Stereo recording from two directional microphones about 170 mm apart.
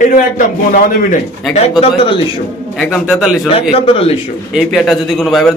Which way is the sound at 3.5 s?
35° left (ahead or behind).